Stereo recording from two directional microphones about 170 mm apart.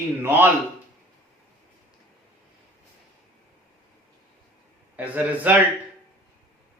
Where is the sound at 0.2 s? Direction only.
10° right (ahead or behind).